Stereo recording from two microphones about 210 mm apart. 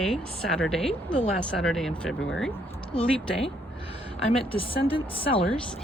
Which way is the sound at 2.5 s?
25° left (ahead or behind).